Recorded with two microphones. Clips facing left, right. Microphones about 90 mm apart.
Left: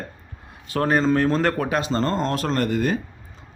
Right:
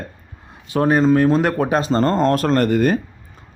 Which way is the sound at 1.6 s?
30° right (ahead or behind).